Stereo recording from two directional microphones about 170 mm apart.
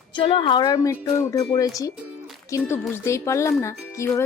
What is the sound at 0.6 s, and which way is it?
Speech, 20° left (ahead or behind).